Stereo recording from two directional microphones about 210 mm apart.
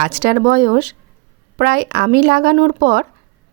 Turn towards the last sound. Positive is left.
turn(degrees=-40)  # may be behind; listen again after turning